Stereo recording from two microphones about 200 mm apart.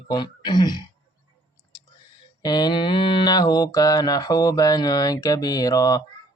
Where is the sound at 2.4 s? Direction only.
20° left (ahead or behind).